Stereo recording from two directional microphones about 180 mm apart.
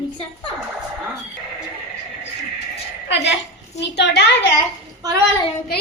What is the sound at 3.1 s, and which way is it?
A woman's voice, 75° left (ahead or behind).